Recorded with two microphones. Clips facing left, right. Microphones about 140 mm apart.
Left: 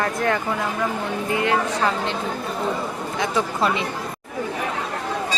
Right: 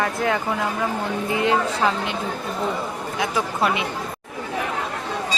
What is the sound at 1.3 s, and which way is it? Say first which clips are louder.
Speech: right 1 dB; 20° right (ahead or behind).